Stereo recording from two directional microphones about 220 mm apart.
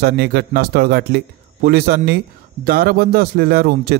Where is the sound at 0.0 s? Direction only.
45° right (ahead or behind).